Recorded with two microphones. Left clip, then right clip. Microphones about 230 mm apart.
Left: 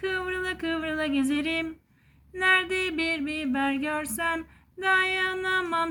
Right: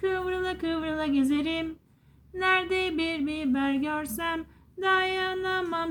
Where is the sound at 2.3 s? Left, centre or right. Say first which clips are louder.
Left 2 dB; centre.